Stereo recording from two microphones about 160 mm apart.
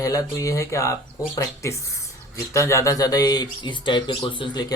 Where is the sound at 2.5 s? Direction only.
20° left (ahead or behind).